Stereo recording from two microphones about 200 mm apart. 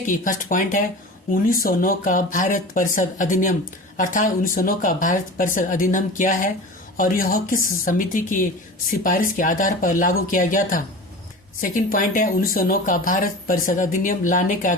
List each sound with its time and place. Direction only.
0.0 s speech: 40° left (ahead or behind)